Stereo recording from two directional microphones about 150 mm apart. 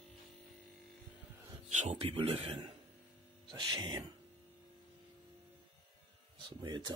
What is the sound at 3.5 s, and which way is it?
Speech, 25° right (ahead or behind).